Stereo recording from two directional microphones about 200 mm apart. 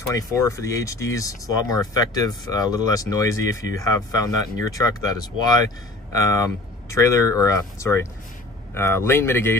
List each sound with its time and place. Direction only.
0.1 s speech: 15° left (ahead or behind)